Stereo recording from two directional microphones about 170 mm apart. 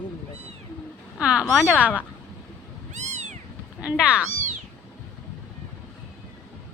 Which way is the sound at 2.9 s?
45° right (ahead or behind).